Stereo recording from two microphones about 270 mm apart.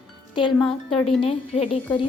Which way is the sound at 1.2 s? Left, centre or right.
Left.